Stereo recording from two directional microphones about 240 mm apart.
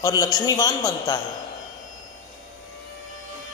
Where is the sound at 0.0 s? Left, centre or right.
Centre.